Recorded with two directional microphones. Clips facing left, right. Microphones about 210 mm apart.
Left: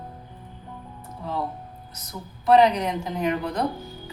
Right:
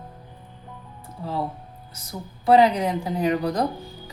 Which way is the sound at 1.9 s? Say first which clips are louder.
Right 4 dB; 30° right (ahead or behind).